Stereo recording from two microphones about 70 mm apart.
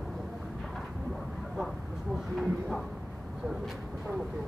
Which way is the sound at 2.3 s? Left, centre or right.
Centre.